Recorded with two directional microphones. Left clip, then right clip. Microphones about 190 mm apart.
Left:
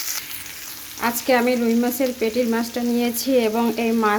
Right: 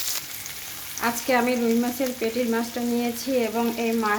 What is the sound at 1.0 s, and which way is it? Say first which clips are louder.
Frying: left 3 dB; 25° left (ahead or behind).